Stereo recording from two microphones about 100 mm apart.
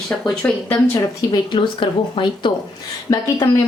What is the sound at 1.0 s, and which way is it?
Speech, 40° left (ahead or behind).